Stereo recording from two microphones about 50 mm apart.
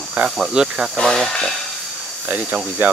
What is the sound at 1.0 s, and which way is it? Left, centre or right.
Speech, centre.